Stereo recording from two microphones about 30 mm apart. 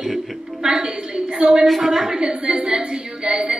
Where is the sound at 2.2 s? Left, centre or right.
Right.